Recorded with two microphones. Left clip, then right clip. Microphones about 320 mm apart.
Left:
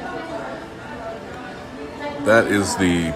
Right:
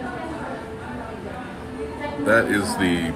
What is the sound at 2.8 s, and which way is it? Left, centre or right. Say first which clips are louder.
Speech: left 2 dB; left.